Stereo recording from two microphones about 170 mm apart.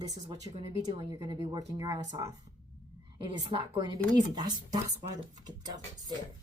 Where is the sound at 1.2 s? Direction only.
25° right (ahead or behind).